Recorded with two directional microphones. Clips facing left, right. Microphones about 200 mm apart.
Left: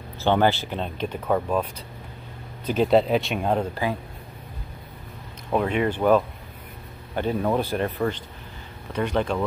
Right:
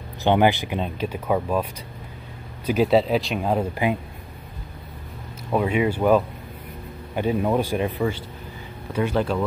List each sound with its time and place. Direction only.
0.2 s speech: 15° right (ahead or behind)
3.7 s speech: 20° right (ahead or behind)
5.5 s speech: 5° right (ahead or behind)
8.9 s speech: 5° right (ahead or behind)